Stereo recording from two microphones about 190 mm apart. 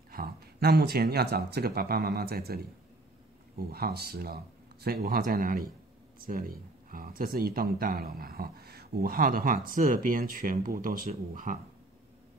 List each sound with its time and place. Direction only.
0.1 s speech: 55° right (ahead or behind)